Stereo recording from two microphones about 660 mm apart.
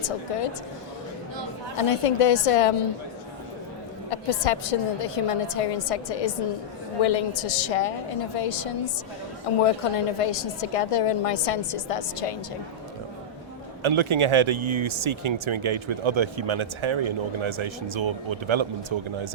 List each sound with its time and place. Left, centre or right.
0.0 s a woman's voice: left
1.7 s a woman's voice: left
4.1 s a woman's voice: left
13.8 s speech: right